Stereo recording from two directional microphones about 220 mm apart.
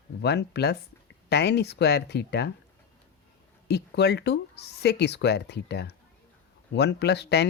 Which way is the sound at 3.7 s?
50° left (ahead or behind).